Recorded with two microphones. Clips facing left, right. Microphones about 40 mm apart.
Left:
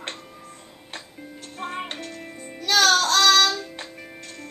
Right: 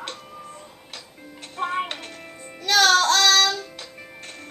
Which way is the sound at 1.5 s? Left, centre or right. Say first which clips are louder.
Right 6 dB; right.